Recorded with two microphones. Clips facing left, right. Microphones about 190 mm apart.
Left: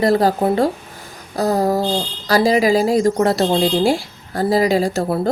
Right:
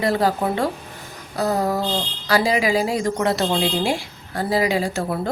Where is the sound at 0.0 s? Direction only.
40° left (ahead or behind).